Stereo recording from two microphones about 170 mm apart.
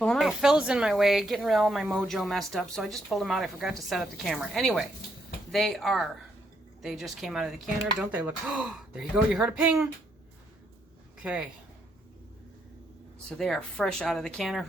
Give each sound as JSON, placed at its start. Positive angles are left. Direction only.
{"t": 0.0, "sound": "speech", "side_deg": 0}
{"t": 11.2, "sound": "speech", "side_deg": -5}
{"t": 13.4, "sound": "speech", "side_deg": 5}